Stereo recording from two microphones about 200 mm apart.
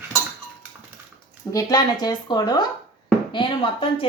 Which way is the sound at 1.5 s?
15° left (ahead or behind).